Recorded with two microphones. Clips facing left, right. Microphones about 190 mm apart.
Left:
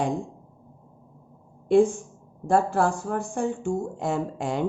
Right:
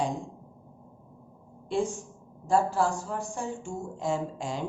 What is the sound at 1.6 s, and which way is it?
A woman's voice, 60° left (ahead or behind).